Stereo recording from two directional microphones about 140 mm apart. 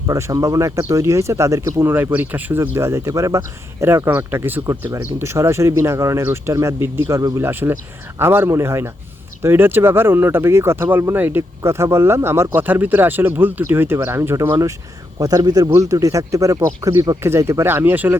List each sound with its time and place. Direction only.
0.1 s speech: 25° right (ahead or behind)